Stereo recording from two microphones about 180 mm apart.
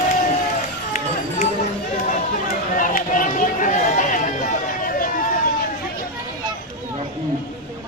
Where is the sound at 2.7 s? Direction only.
50° left (ahead or behind).